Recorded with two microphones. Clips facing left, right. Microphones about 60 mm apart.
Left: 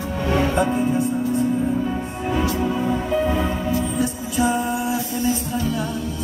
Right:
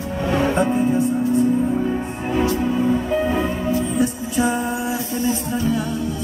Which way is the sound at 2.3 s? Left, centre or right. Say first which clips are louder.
Right 2 dB; right.